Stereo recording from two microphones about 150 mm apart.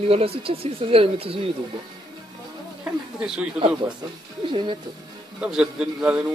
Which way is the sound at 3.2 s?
5° right (ahead or behind).